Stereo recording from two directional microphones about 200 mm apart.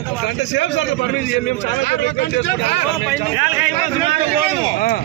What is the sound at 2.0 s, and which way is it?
Speech, 60° left (ahead or behind).